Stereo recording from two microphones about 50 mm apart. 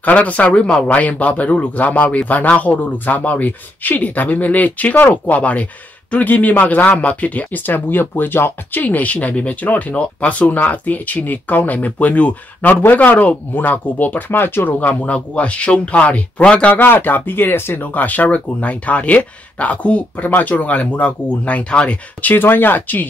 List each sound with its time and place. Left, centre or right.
0.0 s speech: left
0.8 s speech: left
8.8 s speech: left
14.3 s speech: left
14.8 s speech: left
16.7 s speech: left
17.8 s speech: left
22.2 s speech: left